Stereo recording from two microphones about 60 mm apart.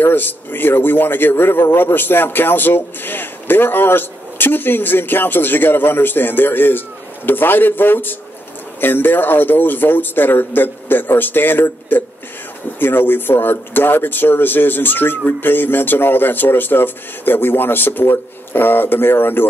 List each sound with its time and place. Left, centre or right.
0.0 s a man's voice: left